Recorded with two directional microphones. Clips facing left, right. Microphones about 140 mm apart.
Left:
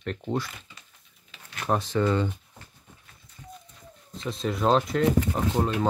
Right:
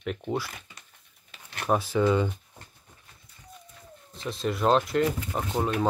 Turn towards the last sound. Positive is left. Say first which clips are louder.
# left 2 dB
turn(degrees=0)  # may be behind; listen again after turning